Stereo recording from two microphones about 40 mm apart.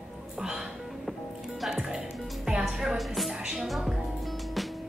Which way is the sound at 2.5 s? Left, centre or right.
Right.